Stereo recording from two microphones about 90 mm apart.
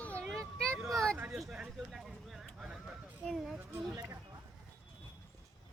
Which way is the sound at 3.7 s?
35° right (ahead or behind).